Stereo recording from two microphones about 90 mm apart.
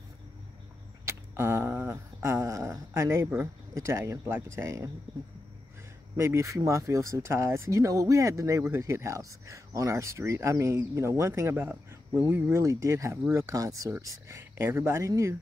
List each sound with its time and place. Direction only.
1.0 s a sound: 30° right (ahead or behind)
2.2 s speech: 35° right (ahead or behind)
6.1 s speech: 30° right (ahead or behind)